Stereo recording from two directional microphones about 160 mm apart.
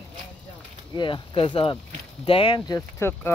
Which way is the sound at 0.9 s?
30° left (ahead or behind).